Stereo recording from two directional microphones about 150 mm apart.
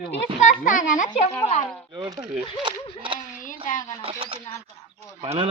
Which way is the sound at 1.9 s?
30° right (ahead or behind).